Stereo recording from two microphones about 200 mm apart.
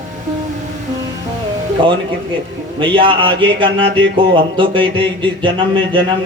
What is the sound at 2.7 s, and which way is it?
Speech, 25° right (ahead or behind).